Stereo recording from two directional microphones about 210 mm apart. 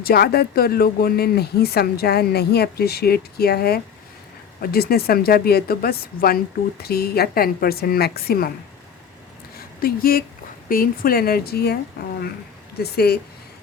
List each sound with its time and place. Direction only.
0.0 s a woman's voice: 45° left (ahead or behind)
9.6 s a woman's voice: 45° left (ahead or behind)